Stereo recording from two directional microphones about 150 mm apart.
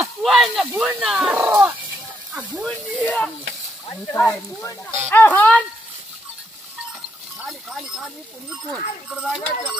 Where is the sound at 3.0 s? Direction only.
5° left (ahead or behind).